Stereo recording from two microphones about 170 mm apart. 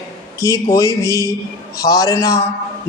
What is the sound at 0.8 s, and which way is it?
Speech, 20° right (ahead or behind).